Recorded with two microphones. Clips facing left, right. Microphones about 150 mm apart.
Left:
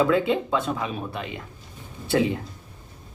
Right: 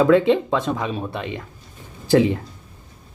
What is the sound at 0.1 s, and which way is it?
Speech, 30° right (ahead or behind).